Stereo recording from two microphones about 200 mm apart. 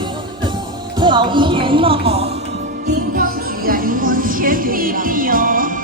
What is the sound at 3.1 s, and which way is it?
Music, 45° right (ahead or behind).